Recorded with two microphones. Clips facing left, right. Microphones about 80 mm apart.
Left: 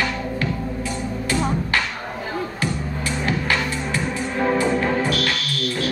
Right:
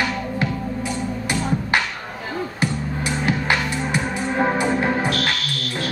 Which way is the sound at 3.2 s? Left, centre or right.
Right.